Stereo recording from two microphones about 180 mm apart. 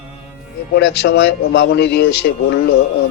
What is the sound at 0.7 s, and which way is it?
A man's voice, 70° left (ahead or behind).